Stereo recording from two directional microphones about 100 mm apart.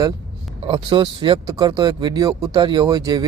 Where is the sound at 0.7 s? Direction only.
55° right (ahead or behind).